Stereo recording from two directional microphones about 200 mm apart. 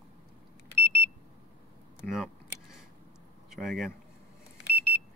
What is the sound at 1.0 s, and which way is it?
Alarm, 30° right (ahead or behind).